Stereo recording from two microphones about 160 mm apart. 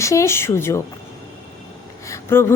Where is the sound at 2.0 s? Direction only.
15° left (ahead or behind).